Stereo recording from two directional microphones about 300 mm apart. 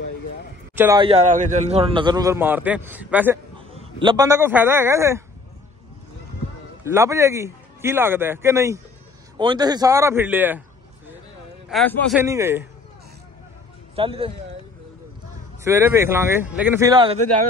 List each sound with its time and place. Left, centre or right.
0.7 s a man's voice: centre
3.5 s a man's voice: centre
6.8 s a man's voice: centre
11.7 s a man's voice: centre
12.2 s a man's voice: centre
13.9 s a man's voice: centre
15.6 s a man's voice: centre